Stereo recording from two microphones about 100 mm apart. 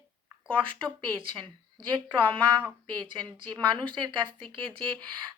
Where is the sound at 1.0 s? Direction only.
55° right (ahead or behind).